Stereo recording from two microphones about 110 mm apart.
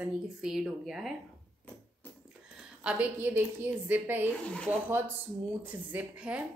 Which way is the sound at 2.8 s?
10° right (ahead or behind).